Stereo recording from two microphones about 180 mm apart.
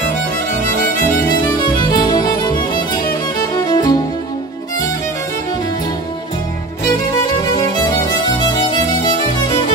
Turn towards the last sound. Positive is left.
turn(degrees=20)  # may be behind; listen again after turning